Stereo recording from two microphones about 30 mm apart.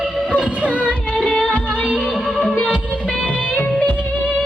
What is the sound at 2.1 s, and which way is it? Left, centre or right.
Music, centre.